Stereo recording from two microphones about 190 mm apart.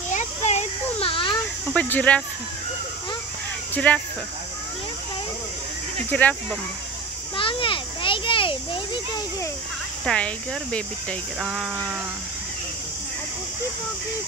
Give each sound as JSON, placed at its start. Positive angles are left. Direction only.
{"t": 0.1, "sound": "a sound", "side_deg": 35}
{"t": 1.7, "sound": "speech", "side_deg": 10}
{"t": 3.7, "sound": "speech", "side_deg": 5}
{"t": 6.0, "sound": "speech", "side_deg": 10}
{"t": 7.3, "sound": "a sound", "side_deg": 25}
{"t": 10.0, "sound": "speech", "side_deg": 5}